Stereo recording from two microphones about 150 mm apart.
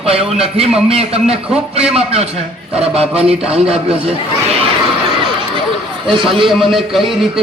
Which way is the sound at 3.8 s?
40° right (ahead or behind).